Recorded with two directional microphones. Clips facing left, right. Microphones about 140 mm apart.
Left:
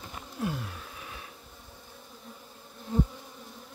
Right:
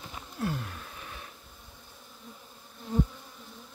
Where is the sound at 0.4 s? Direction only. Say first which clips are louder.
Even; 10° left (ahead or behind).